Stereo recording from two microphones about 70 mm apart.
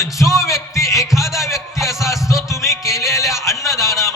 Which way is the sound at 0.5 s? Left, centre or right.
Left.